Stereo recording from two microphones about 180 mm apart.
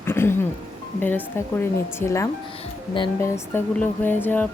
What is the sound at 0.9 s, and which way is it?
Speech, 10° left (ahead or behind).